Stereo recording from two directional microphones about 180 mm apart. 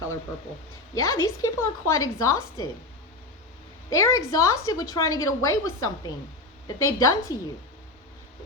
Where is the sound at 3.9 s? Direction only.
15° left (ahead or behind).